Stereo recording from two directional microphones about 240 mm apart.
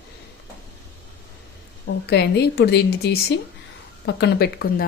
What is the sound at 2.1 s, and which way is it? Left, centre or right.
A woman's voice, left.